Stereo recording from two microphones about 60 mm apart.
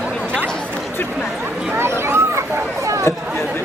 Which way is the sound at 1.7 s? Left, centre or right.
Right.